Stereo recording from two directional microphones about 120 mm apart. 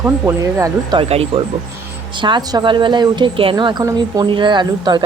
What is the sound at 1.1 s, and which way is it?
Speech, 60° right (ahead or behind).